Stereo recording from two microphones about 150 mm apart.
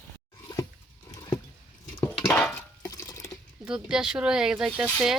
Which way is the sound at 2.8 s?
20° left (ahead or behind).